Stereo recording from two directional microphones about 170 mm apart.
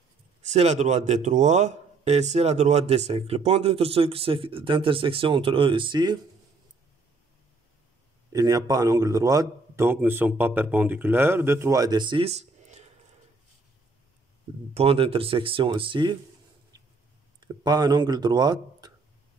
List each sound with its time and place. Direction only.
0.4 s speech: 40° right (ahead or behind)
8.3 s speech: 20° right (ahead or behind); by 12.8 s 40° right (ahead or behind)
14.7 s speech: 35° right (ahead or behind)
16.7 s a sound: 20° right (ahead or behind)
17.4 s speech: 25° right (ahead or behind)